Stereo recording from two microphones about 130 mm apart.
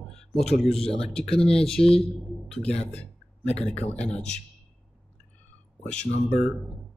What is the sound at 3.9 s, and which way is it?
Speech, 10° left (ahead or behind).